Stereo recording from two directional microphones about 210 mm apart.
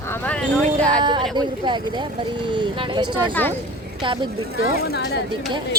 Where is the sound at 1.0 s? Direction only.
20° right (ahead or behind).